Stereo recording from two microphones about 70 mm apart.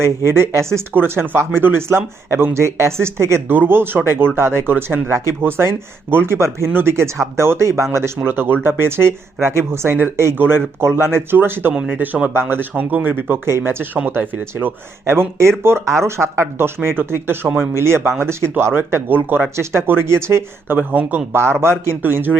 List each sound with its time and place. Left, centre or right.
0.3 s speech: right
6.9 s speech: right
8.3 s speech: right
11.7 s speech: centre
11.9 s speech: right
15.1 s speech: right
20.7 s speech: right
21.6 s speech: right